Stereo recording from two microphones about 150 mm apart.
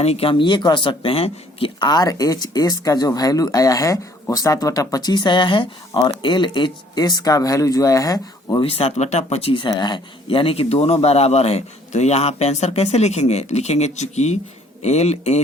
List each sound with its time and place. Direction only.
0.0 s speech: 40° left (ahead or behind); by 8.6 s 25° left (ahead or behind)
8.6 s speech: 45° left (ahead or behind)